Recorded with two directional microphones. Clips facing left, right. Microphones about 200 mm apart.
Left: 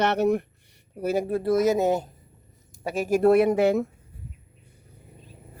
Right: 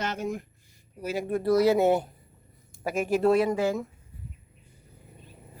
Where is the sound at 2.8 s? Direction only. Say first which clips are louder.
Left 3 dB; 35° left (ahead or behind); by 3.8 s 65° left (ahead or behind).